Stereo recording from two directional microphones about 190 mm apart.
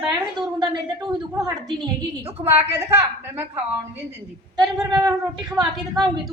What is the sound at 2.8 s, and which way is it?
Speech, 10° right (ahead or behind).